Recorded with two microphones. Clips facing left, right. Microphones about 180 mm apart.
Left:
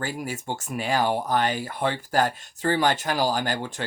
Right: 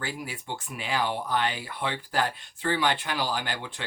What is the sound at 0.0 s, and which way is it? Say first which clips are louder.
Speech: left 5 dB; 45° left (ahead or behind).